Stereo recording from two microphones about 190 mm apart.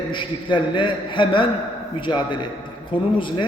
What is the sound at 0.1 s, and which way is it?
A man's voice, 25° left (ahead or behind).